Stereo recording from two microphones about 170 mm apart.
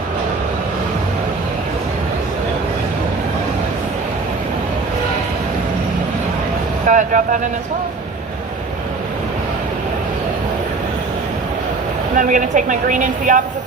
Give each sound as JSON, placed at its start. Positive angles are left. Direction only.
{"t": 6.8, "sound": "vehicle", "side_deg": -50}
{"t": 12.1, "sound": "speech", "side_deg": -50}